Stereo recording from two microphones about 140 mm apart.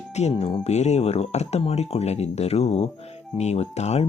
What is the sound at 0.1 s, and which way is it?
Speech, 50° left (ahead or behind).